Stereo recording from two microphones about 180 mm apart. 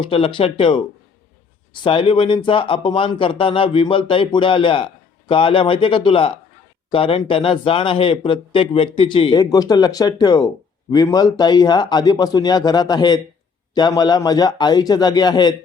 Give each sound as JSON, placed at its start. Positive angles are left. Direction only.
{"t": 0.0, "sound": "speech", "side_deg": 30}